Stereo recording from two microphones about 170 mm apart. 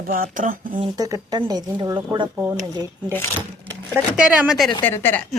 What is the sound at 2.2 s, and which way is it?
Speech, 10° right (ahead or behind).